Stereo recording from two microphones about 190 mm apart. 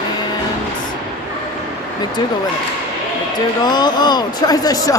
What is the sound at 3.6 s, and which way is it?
Speech, 20° left (ahead or behind).